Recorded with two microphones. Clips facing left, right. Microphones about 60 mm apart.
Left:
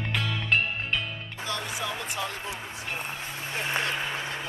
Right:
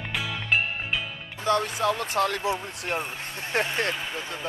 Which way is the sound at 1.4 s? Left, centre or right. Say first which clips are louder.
Right 10 dB; right.